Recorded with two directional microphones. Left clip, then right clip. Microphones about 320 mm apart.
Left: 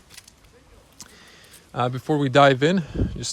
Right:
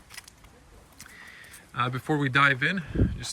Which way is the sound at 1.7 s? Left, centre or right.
Centre.